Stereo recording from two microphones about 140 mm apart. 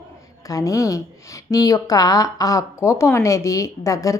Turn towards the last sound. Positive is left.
turn(degrees=25)  # may be behind; listen again after turning